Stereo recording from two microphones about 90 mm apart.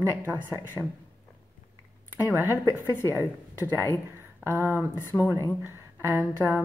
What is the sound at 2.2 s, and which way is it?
Speech, 30° left (ahead or behind).